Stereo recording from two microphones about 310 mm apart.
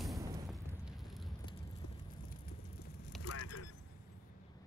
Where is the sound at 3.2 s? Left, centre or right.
Left.